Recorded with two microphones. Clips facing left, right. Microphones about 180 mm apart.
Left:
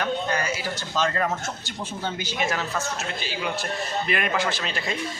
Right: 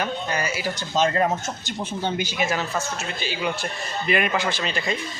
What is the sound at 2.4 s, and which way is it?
A man's voice, centre (ahead or behind).